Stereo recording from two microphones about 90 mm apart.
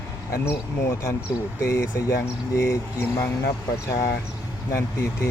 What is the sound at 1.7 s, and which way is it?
Speech, 30° left (ahead or behind).